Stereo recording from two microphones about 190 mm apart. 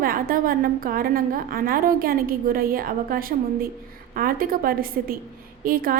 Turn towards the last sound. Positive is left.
turn(degrees=-50)  # may be behind; listen again after turning